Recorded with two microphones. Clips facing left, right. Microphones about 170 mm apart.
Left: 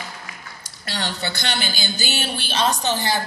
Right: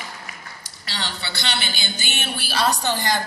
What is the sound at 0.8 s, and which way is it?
Speech, 50° left (ahead or behind).